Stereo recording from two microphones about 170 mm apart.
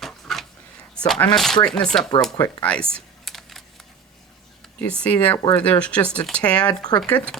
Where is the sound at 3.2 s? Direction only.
Centre (ahead or behind).